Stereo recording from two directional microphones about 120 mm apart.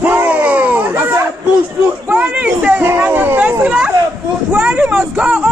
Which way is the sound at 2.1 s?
10° right (ahead or behind).